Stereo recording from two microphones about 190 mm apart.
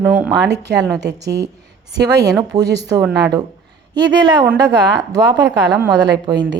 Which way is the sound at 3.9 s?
20° right (ahead or behind).